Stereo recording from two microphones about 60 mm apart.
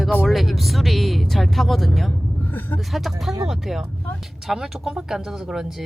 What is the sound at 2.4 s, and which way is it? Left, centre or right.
Vehicle, left.